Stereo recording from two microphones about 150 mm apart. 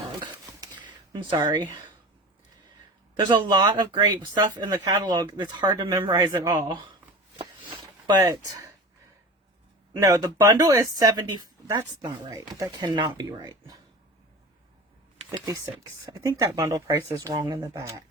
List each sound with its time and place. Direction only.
0.2 s a sound: 30° right (ahead or behind)
3.2 s speech: 30° right (ahead or behind)
8.2 s speech: 25° right (ahead or behind)
9.9 s speech: 25° right (ahead or behind)
15.3 s speech: 20° right (ahead or behind)